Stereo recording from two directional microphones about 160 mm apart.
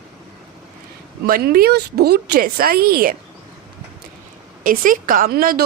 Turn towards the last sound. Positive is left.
turn(degrees=-70)  # may be behind; listen again after turning